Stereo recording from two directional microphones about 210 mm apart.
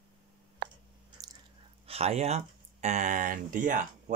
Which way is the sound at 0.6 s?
40° right (ahead or behind).